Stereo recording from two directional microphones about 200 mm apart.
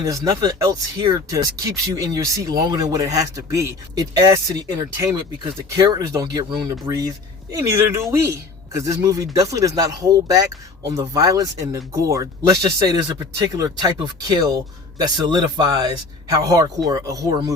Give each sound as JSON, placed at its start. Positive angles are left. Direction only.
{"t": 0.0, "sound": "speech", "side_deg": -15}